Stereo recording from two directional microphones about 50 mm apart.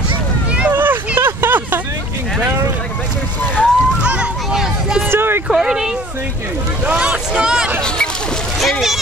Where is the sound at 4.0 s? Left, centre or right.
Centre.